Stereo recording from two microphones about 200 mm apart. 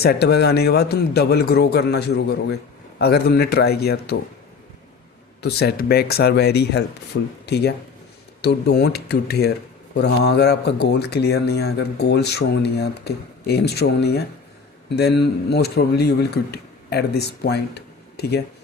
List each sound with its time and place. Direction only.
0.0 s a man's voice: 55° left (ahead or behind)
5.4 s a man's voice: 55° left (ahead or behind)